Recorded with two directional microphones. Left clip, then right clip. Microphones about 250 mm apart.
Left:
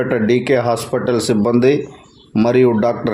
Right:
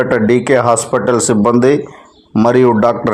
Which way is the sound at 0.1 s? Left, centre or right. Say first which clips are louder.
Right 4 dB; centre.